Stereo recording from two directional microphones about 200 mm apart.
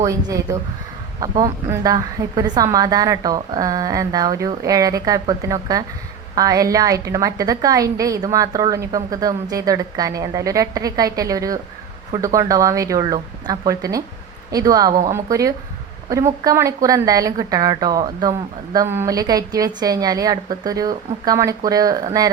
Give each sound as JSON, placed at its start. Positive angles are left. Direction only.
{"t": 0.0, "sound": "a woman's voice", "side_deg": -15}